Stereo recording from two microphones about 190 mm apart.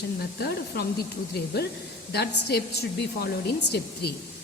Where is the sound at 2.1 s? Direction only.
60° left (ahead or behind).